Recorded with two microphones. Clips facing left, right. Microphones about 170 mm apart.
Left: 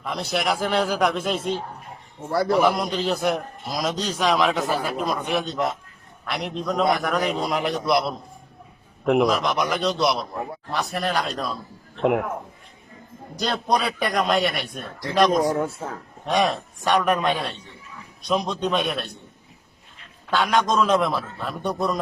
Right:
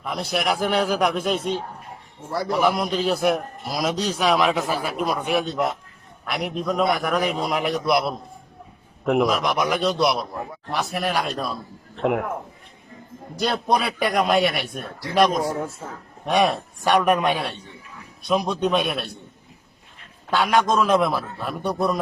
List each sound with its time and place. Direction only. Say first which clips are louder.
0.0 s a man's voice: even; centre (ahead or behind)
10.7 s a man's voice: right 1 dB; 10° right (ahead or behind)
12.0 s a man's voice: left 1 dB; centre (ahead or behind)
13.4 s a man's voice: right 1 dB; 5° right (ahead or behind)
20.3 s a man's voice: right 1 dB; 5° right (ahead or behind)